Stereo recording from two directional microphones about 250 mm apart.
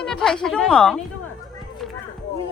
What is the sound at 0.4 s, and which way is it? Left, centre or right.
Speech, centre.